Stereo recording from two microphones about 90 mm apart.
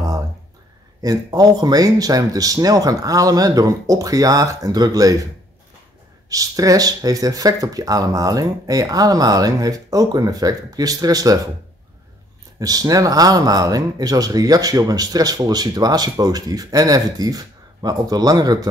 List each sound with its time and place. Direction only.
1.0 s speech: 45° right (ahead or behind)
6.2 s speech: 40° right (ahead or behind)
12.5 s speech: 45° right (ahead or behind)